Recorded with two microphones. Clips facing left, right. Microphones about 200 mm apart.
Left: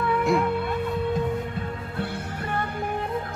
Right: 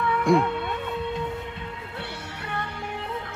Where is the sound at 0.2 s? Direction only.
Centre (ahead or behind).